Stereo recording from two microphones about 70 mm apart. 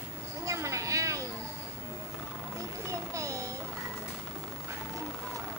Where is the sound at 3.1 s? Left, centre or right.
Right.